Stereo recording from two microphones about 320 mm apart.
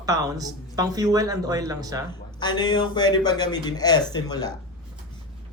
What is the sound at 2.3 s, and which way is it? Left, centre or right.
Speech, centre.